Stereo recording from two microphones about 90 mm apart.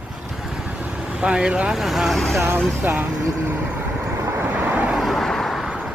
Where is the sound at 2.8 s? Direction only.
20° right (ahead or behind).